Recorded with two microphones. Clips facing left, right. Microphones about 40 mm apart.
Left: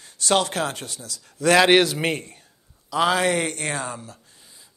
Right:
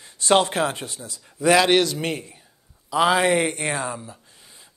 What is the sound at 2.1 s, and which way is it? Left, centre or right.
Speech, centre.